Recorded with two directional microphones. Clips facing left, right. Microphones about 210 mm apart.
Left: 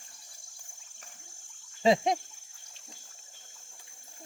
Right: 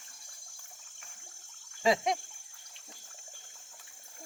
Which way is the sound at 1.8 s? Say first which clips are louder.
Left 4 dB; 25° left (ahead or behind).